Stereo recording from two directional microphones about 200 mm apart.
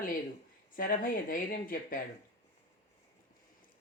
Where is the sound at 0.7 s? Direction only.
45° left (ahead or behind).